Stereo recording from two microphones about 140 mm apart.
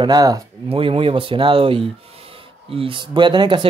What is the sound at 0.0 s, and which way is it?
Speech, 30° right (ahead or behind).